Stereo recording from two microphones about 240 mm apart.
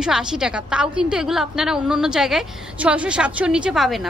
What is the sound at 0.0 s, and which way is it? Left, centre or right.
A woman's voice, centre.